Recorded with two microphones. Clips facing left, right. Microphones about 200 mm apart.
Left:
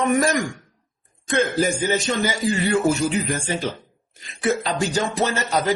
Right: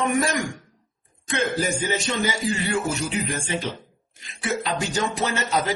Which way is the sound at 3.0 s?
45° left (ahead or behind).